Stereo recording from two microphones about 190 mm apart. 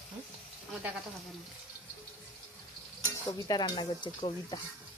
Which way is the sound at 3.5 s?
20° left (ahead or behind).